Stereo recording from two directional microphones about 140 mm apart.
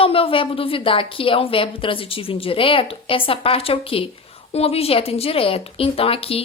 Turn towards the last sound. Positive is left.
turn(degrees=45)  # may be behind; listen again after turning